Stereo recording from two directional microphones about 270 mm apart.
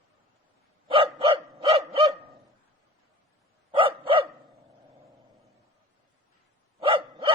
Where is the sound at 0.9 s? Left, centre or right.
Centre.